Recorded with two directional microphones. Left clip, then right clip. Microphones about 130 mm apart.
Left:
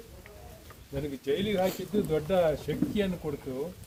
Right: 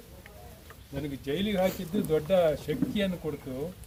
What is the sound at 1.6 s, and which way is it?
Speech, 10° left (ahead or behind).